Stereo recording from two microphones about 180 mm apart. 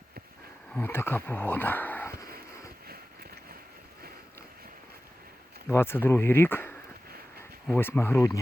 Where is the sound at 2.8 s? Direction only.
60° right (ahead or behind).